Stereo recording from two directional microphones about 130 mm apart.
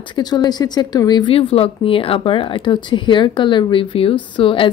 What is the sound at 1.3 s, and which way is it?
A woman's voice, 45° left (ahead or behind).